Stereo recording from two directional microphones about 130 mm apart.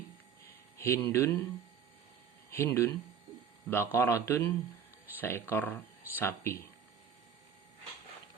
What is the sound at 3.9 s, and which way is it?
Speech, 20° left (ahead or behind).